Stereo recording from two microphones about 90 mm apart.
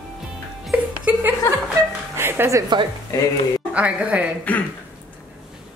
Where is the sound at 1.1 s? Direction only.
20° right (ahead or behind).